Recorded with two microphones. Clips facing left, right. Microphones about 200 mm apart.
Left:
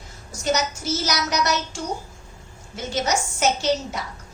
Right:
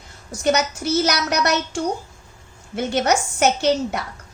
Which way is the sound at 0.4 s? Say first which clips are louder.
Right 4 dB; 60° right (ahead or behind).